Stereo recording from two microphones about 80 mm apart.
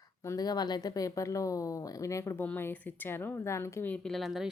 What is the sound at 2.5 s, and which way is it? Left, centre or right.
Speech, left.